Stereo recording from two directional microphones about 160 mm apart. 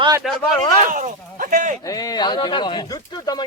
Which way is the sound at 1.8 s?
25° left (ahead or behind).